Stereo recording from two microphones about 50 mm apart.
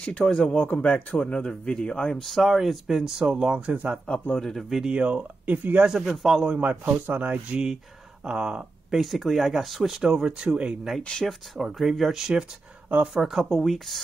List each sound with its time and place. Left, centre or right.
0.2 s speech: centre
0.8 s speech: left
2.2 s speech: centre; by 4.0 s right
4.6 s speech: centre
4.8 s speech: right
5.9 s speech: centre
6.4 s speech: right
8.3 s speech: centre
9.0 s speech: centre
10.4 s speech: centre
11.0 s speech: left
11.2 s speech: centre